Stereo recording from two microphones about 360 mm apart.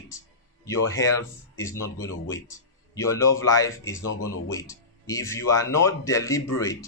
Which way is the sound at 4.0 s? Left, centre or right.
Left.